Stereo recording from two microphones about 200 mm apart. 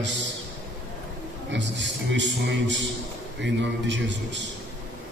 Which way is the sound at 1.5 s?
60° right (ahead or behind).